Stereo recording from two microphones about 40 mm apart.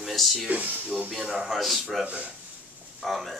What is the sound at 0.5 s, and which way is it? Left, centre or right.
Speech, right.